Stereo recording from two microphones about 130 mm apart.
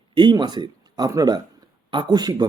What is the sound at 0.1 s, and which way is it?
Speech, 40° right (ahead or behind).